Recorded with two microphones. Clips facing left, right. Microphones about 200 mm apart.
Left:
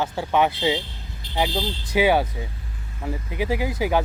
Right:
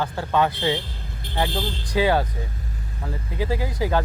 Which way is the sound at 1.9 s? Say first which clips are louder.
Left 1 dB; 10° left (ahead or behind).